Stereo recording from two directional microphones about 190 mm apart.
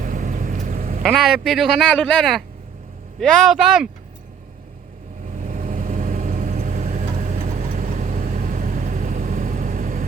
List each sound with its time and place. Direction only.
0.0 s quack: 45° right (ahead or behind)
1.0 s speech: centre (ahead or behind)
5.4 s vehicle: 45° right (ahead or behind)